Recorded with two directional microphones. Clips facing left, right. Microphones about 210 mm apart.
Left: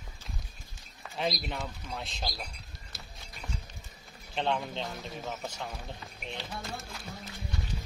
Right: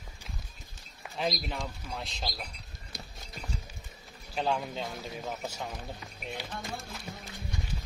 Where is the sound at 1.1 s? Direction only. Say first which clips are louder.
Even; centre (ahead or behind).